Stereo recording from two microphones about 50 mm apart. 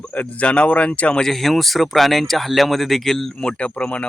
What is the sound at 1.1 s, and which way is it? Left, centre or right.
Speech, centre.